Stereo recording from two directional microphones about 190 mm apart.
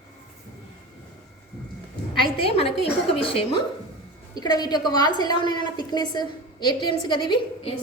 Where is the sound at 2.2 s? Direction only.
30° left (ahead or behind).